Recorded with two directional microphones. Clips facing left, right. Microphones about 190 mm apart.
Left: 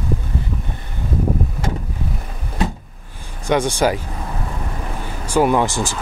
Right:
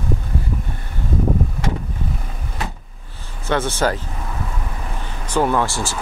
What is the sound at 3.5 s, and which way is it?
Speech, 15° left (ahead or behind).